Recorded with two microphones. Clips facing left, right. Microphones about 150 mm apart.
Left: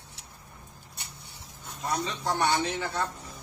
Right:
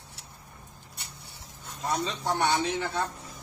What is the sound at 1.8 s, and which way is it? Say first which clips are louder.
A man's voice: right 1 dB; 25° right (ahead or behind).